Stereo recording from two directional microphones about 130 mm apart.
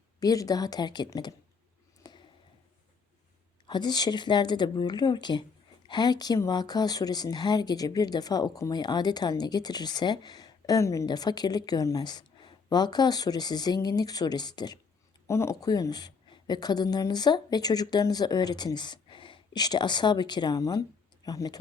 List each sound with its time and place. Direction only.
0.2 s a woman's voice: 30° left (ahead or behind)
2.0 s a sound: 35° left (ahead or behind)
3.7 s speech: 35° left (ahead or behind)
15.3 s a woman's voice: 20° left (ahead or behind)